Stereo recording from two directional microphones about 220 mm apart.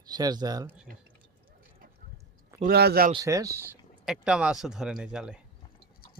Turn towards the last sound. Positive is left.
turn(degrees=-5)  # may be behind; listen again after turning